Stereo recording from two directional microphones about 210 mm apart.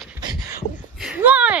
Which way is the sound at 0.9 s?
5° right (ahead or behind).